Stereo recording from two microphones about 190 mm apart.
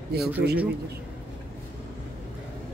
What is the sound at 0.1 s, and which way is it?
Speech, 60° right (ahead or behind).